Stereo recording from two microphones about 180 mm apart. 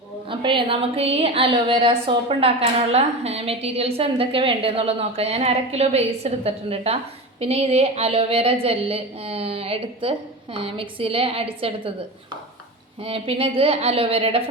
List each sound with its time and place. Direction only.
0.3 s a woman's voice: 30° right (ahead or behind)
13.0 s a woman's voice: 30° right (ahead or behind)